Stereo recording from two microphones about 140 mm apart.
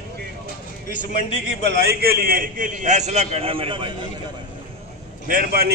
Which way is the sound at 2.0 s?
90° right.